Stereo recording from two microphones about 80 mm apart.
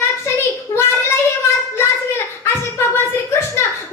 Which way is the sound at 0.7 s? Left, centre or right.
Left.